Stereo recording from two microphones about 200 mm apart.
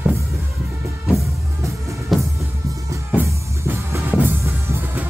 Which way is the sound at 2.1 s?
Centre (ahead or behind).